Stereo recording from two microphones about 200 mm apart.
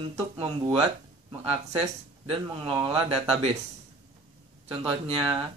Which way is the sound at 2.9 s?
30° right (ahead or behind).